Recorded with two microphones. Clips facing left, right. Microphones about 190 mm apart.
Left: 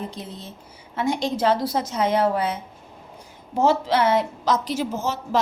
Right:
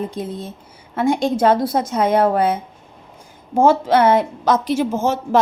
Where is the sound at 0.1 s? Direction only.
55° right (ahead or behind).